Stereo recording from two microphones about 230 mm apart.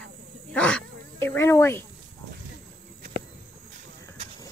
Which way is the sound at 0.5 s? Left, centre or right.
Centre.